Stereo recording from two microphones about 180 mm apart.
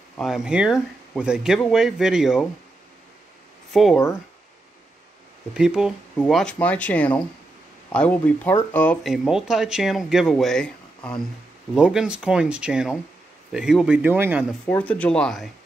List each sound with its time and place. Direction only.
0.2 s speech: 5° right (ahead or behind)
3.7 s speech: centre (ahead or behind)
5.5 s speech: 5° right (ahead or behind)
9.0 s speech: centre (ahead or behind)
14.7 s speech: 10° left (ahead or behind)